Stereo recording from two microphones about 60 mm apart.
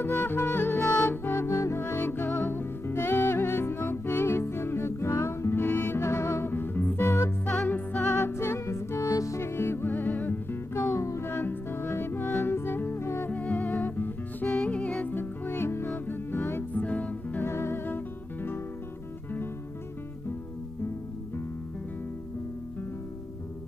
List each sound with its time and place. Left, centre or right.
0.0 s music: left
0.7 s music: left
5.9 s music: left
7.6 s music: left
8.3 s music: left
9.4 s music: left
11.0 s music: left
11.2 s music: left
13.3 s music: left
15.0 s music: left
16.7 s music: left
17.5 s music: left